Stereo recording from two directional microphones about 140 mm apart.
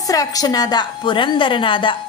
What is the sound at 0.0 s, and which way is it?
A woman's voice, 25° left (ahead or behind).